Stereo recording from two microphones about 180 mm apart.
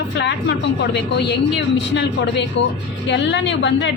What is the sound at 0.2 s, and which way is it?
A woman's voice, 75° left (ahead or behind).